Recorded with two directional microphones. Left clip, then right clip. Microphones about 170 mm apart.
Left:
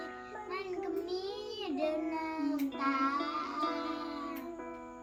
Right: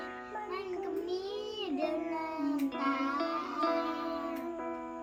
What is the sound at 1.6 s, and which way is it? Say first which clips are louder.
Music: left 1 dB; 10° left (ahead or behind).